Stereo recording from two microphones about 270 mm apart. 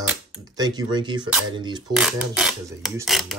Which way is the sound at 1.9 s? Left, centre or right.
Centre.